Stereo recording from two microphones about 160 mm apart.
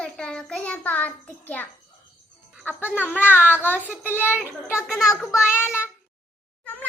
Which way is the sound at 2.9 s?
10° left (ahead or behind).